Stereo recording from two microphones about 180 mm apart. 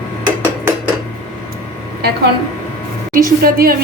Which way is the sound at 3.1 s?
50° right (ahead or behind).